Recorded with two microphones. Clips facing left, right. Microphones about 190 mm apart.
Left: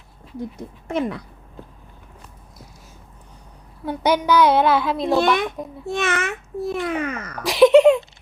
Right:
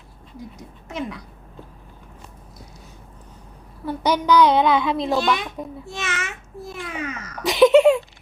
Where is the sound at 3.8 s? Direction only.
10° left (ahead or behind).